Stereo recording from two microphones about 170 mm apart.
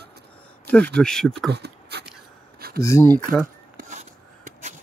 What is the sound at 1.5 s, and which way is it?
Speech, 75° right (ahead or behind).